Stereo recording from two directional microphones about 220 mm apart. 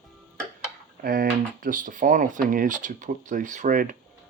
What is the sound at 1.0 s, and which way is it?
Speech, 40° right (ahead or behind).